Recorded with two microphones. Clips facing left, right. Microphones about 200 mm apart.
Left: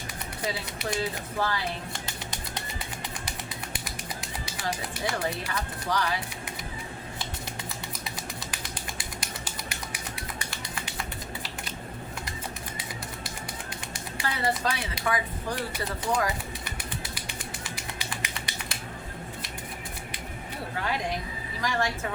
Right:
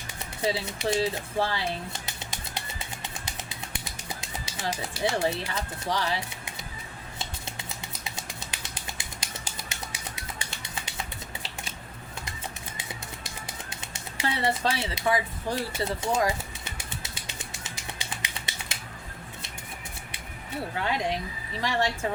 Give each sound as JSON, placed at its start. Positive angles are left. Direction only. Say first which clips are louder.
{"t": 0.4, "sound": "speech", "louder": "right 5 dB", "side_deg": -25}
{"t": 4.2, "sound": "bird", "louder": "left 1 dB", "side_deg": -25}
{"t": 5.0, "sound": "speech", "louder": "right 4 dB", "side_deg": -25}
{"t": 9.0, "sound": "a sound", "louder": "left 3 dB", "side_deg": -25}
{"t": 13.9, "sound": "a sound", "louder": "right 3 dB", "side_deg": -25}
{"t": 21.6, "sound": "speech", "louder": "right 1 dB", "side_deg": -25}